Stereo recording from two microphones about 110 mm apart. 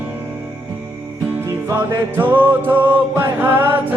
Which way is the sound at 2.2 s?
20° right (ahead or behind).